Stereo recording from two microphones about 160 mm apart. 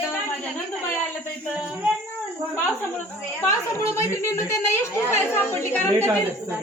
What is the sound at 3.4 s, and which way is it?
A woman's voice, 20° left (ahead or behind).